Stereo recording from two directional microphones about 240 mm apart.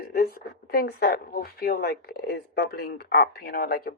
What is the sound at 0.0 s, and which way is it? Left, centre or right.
A woman's voice, left.